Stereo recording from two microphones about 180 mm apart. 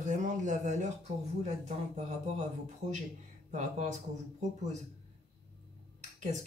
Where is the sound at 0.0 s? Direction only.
45° right (ahead or behind).